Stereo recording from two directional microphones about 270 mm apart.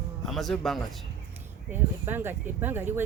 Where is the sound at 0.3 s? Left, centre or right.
Centre.